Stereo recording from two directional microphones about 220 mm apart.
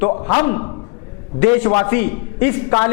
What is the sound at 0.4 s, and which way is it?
A man's voice, 15° left (ahead or behind).